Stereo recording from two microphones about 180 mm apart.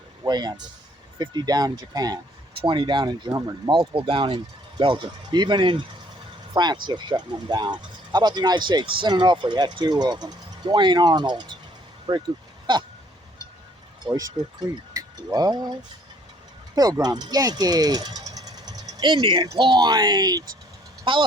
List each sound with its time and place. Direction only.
0.3 s speech: 25° right (ahead or behind)
14.1 s speech: 20° right (ahead or behind)
16.7 s speech: 20° right (ahead or behind)